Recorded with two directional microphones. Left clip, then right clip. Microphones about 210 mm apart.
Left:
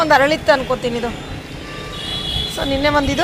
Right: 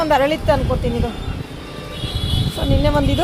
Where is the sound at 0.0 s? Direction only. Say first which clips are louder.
Left 3 dB; 15° right (ahead or behind).